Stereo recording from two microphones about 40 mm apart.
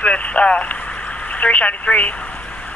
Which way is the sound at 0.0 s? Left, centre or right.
Left.